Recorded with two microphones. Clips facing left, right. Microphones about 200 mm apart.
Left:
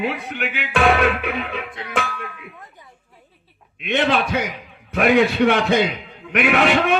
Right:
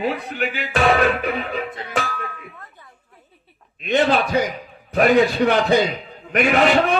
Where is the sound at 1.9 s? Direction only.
35° right (ahead or behind).